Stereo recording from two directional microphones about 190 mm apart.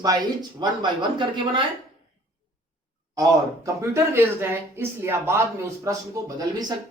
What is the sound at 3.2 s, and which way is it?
Speech, 15° right (ahead or behind).